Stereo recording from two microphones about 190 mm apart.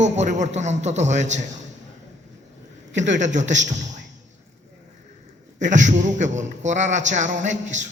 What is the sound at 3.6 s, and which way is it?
Speech, 40° right (ahead or behind).